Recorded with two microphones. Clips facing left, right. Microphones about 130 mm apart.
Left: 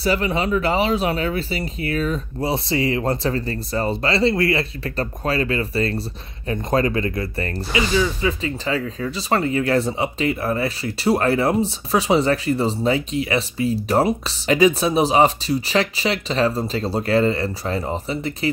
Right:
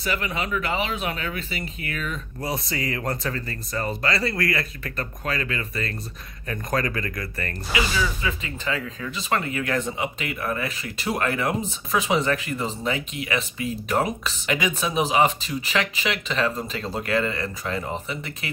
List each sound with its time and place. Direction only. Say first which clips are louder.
0.0 s speech: left 7 dB; 30° left (ahead or behind)